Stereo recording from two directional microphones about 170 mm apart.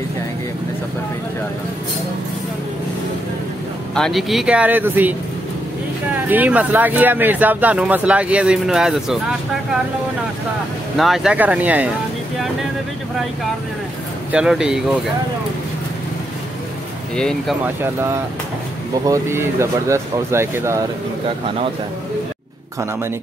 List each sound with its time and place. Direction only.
3.9 s speech: centre (ahead or behind)
6.2 s speech: 10° right (ahead or behind)
11.0 s speech: centre (ahead or behind)
14.3 s speech: 5° right (ahead or behind)
17.1 s speech: 5° left (ahead or behind)
19.0 s speech: 15° right (ahead or behind)